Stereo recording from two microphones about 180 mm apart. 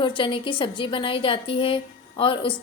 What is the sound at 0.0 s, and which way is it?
A woman's voice, 25° left (ahead or behind).